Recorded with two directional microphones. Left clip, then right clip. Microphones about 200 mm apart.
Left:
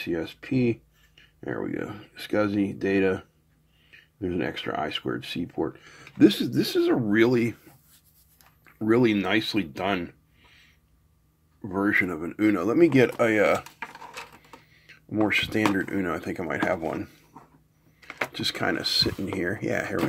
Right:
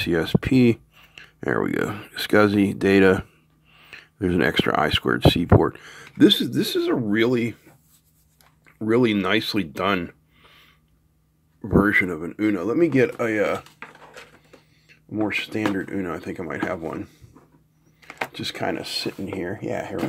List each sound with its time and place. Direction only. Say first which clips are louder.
0.0 s speech: right 8 dB; 35° right (ahead or behind); by 7.6 s 10° right (ahead or behind)
8.4 s a sound: right 1 dB; 5° right (ahead or behind); by 10.7 s 25° right (ahead or behind)
11.6 s speech: right 5 dB; 25° right (ahead or behind); by 13.7 s 5° left (ahead or behind)
14.7 s speech: even; 5° left (ahead or behind)